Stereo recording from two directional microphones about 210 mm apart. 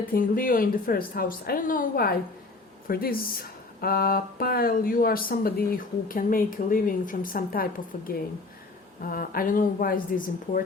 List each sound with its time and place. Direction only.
0.1 s speech: 40° left (ahead or behind)